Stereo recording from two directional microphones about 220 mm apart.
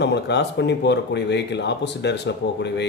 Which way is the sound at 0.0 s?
50° left (ahead or behind).